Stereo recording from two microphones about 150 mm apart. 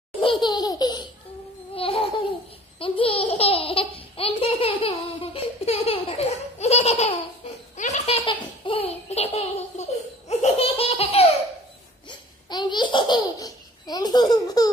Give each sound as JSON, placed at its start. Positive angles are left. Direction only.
{"t": 0.2, "sound": "laughter", "side_deg": 30}
{"t": 1.8, "sound": "laughter", "side_deg": 40}
{"t": 2.8, "sound": "baby laughter", "side_deg": 35}
{"t": 8.3, "sound": "baby laughter", "side_deg": 35}
{"t": 12.1, "sound": "laughter", "side_deg": 30}